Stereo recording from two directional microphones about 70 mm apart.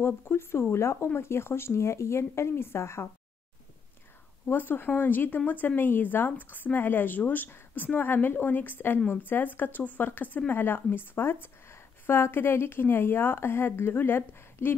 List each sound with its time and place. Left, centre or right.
0.0 s speech: left
4.5 s speech: left